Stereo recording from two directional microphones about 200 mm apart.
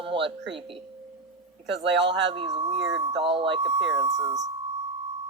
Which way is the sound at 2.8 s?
60° right (ahead or behind).